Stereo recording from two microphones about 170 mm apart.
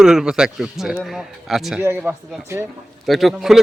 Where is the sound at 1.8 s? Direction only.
15° right (ahead or behind).